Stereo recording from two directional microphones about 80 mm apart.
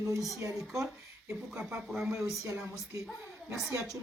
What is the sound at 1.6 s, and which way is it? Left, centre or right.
Speech, centre.